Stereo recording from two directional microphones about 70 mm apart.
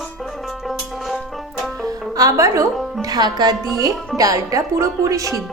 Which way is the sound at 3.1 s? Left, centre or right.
Right.